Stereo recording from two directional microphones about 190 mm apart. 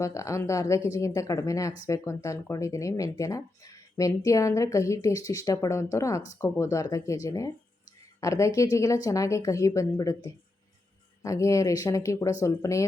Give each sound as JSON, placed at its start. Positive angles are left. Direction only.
{"t": 0.0, "sound": "speech", "side_deg": 15}
{"t": 11.2, "sound": "speech", "side_deg": 15}